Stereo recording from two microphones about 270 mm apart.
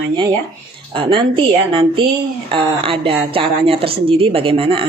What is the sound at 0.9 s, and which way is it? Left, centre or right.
A woman's voice, centre.